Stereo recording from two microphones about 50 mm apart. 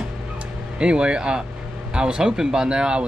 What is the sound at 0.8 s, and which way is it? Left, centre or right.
Speech, centre.